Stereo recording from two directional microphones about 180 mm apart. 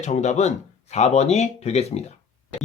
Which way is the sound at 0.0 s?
40° left (ahead or behind).